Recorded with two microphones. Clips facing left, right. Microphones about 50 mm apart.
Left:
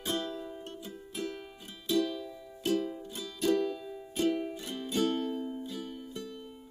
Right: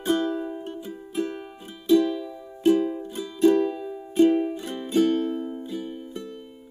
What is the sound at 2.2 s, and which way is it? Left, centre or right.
Music, right.